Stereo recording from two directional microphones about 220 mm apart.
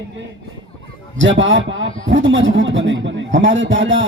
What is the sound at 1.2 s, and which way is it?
A man's voice, 60° right (ahead or behind).